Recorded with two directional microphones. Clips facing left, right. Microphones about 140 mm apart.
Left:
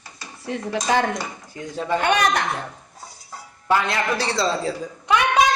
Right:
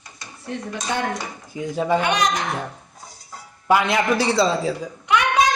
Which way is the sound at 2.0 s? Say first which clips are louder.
Left 1 dB; 55° left (ahead or behind).